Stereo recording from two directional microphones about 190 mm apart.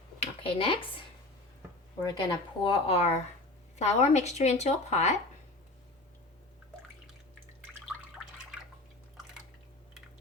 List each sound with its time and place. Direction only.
0.2 s a woman's voice: 30° left (ahead or behind)